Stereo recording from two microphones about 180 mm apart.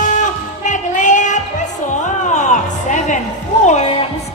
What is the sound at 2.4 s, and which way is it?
Music, 45° left (ahead or behind).